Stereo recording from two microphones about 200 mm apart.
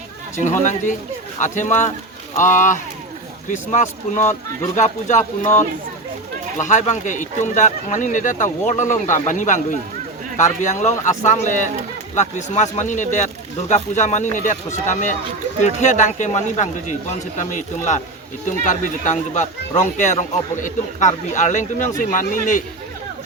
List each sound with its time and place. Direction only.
0.3 s a man's voice: 40° left (ahead or behind)
6.6 s a man's voice: 40° left (ahead or behind)